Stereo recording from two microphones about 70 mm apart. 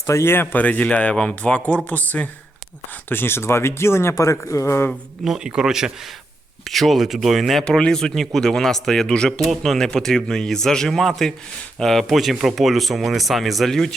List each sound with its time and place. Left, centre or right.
0.0 s speech: left
3.1 s speech: left
4.1 s a man's voice: left
5.2 s a man's voice: centre
7.8 s speech: centre